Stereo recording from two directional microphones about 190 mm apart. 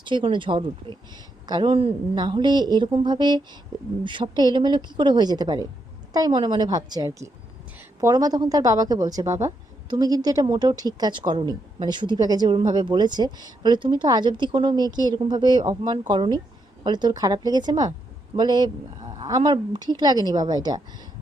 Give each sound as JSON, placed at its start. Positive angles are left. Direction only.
{"t": 0.0, "sound": "speech", "side_deg": -25}